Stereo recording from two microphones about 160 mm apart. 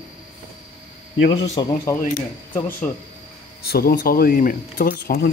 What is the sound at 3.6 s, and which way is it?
Speech, 75° left (ahead or behind).